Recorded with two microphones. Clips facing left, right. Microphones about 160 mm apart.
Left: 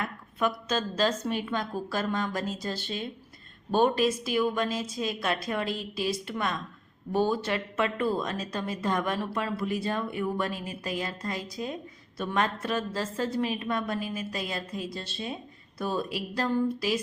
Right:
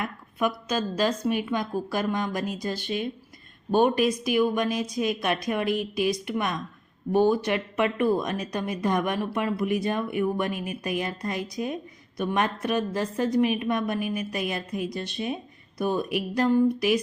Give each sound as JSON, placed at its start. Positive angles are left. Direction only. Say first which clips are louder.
{"t": 0.0, "sound": "speech", "louder": "right 2 dB", "side_deg": -10}